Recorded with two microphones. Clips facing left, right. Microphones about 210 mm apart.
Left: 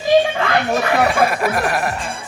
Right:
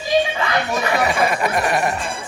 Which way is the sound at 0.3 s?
50° left (ahead or behind).